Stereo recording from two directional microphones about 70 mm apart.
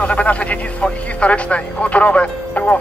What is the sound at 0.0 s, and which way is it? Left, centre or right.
Speech, centre.